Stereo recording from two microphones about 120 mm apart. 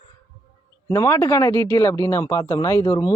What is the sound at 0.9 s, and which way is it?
Speech, 25° left (ahead or behind).